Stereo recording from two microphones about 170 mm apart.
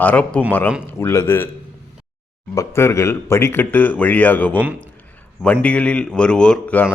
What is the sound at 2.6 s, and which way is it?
Speech, 15° left (ahead or behind).